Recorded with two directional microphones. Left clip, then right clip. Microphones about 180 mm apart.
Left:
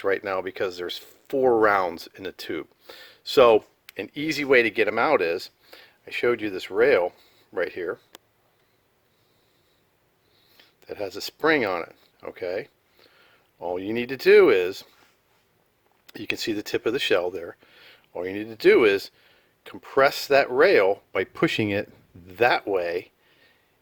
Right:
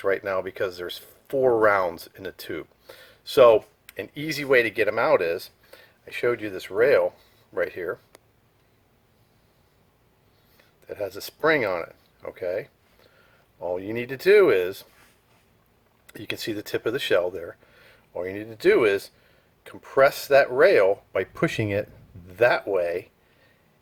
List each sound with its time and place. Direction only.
0.0 s speech: 35° left (ahead or behind)
10.6 s speech: 35° left (ahead or behind)
16.0 s speech: 35° left (ahead or behind)